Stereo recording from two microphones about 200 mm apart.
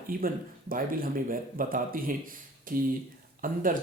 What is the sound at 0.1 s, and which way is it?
Speech, 45° right (ahead or behind).